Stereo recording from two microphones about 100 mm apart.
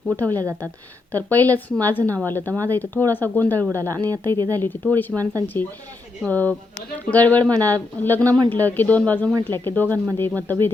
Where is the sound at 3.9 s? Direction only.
35° right (ahead or behind).